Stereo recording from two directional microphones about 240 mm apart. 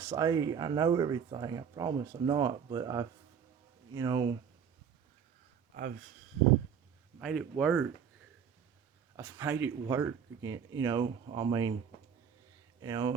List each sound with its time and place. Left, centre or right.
0.0 s speech: centre
7.2 s speech: centre
9.1 s speech: centre
12.8 s speech: centre